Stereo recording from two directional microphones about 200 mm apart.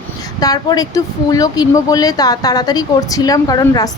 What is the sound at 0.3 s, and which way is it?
A woman's voice, 20° left (ahead or behind).